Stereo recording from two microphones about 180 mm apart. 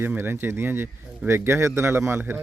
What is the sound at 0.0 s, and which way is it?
Speech, 10° right (ahead or behind).